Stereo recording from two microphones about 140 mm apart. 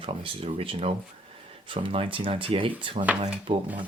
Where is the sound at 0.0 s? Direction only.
40° right (ahead or behind).